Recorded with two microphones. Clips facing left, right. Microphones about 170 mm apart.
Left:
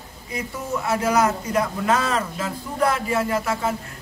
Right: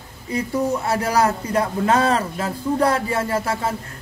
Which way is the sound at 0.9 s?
35° right (ahead or behind).